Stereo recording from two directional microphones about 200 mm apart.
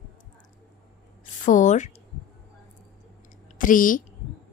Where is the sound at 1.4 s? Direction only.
40° left (ahead or behind).